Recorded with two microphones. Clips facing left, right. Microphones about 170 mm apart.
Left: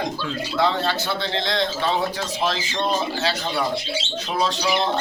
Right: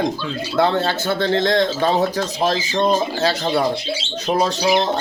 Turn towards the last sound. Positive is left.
turn(degrees=-50)  # may be behind; listen again after turning